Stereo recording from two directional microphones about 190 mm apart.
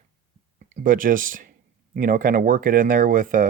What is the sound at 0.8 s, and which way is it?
Speech, 45° right (ahead or behind).